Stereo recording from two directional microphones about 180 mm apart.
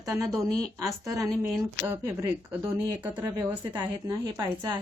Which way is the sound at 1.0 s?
15° right (ahead or behind).